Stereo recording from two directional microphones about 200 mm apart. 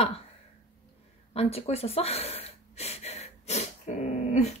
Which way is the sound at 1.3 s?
30° left (ahead or behind).